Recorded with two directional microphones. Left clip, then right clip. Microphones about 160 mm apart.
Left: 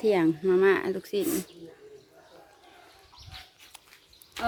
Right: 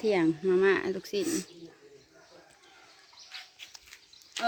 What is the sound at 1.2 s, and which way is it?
Speech, 90° left.